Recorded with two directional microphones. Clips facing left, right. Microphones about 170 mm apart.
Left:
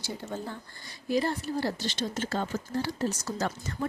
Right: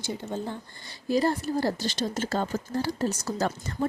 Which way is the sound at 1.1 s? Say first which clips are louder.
Right 3 dB; 40° right (ahead or behind).